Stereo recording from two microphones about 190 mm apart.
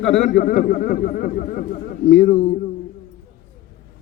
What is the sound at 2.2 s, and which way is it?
Speech, 65° left (ahead or behind).